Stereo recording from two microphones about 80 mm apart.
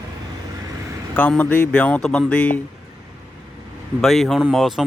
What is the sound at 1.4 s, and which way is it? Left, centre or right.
Speech, centre.